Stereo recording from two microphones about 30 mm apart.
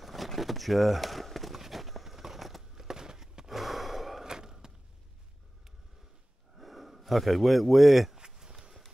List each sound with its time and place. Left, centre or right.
0.0 s a sound: centre
0.4 s walk: centre
2.7 s walk: centre
3.4 s snort: centre
4.2 s skateboard: centre
6.5 s speech: centre
8.2 s a sound: right